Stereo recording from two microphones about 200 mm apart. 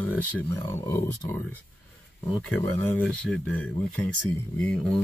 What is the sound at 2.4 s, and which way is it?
Speech, 10° left (ahead or behind).